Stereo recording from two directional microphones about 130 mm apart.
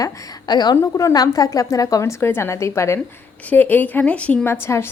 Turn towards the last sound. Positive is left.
turn(degrees=20)  # may be behind; listen again after turning